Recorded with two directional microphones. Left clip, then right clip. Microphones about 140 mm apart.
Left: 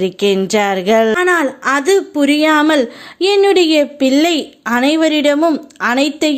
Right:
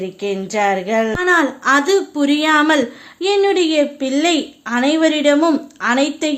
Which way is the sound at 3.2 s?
45° left (ahead or behind).